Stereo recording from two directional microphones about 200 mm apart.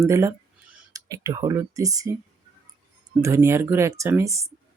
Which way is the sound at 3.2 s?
15° right (ahead or behind).